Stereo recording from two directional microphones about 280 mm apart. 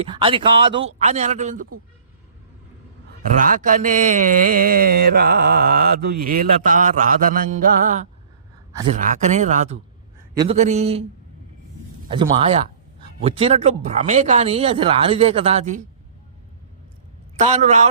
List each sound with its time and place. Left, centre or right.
0.0 s speech: centre
3.3 s speech: right
12.1 s speech: right
17.3 s a man's voice: right